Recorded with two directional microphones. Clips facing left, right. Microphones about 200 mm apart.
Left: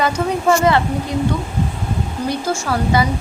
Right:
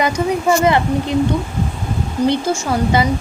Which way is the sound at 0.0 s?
15° right (ahead or behind).